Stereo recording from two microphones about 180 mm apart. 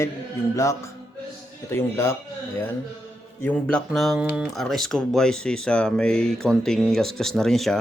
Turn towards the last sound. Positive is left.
turn(degrees=0)  # may be behind; listen again after turning